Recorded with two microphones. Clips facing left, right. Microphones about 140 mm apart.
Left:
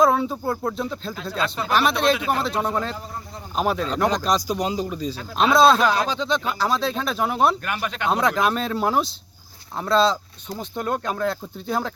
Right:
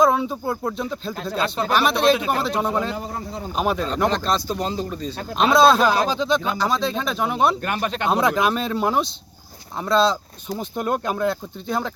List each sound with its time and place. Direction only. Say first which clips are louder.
0.0 s speech: even; centre (ahead or behind)
4.1 s a man's voice: even; 10° left (ahead or behind); by 6.4 s 10° right (ahead or behind)
6.6 s speech: right 1 dB; 5° left (ahead or behind)
7.6 s speech: right 3 dB; 25° right (ahead or behind)
8.1 s speech: right 1 dB; 5° right (ahead or behind)
10.5 s speech: right 2 dB; 15° right (ahead or behind)